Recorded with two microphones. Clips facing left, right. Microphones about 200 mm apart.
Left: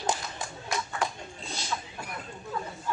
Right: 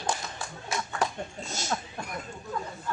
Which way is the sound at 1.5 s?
45° right (ahead or behind).